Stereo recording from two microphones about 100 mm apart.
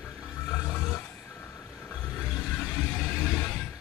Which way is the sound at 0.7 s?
10° left (ahead or behind).